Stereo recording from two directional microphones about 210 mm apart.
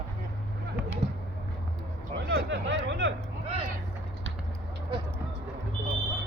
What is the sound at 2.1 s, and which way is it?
Speech, 55° right (ahead or behind).